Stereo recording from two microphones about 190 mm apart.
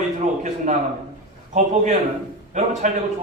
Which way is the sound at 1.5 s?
40° right (ahead or behind).